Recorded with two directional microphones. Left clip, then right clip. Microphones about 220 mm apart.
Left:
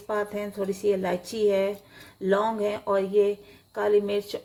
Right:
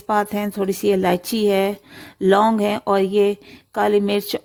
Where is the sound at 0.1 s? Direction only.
50° right (ahead or behind).